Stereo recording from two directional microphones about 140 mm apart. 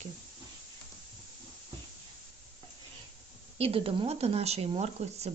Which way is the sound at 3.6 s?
45° right (ahead or behind).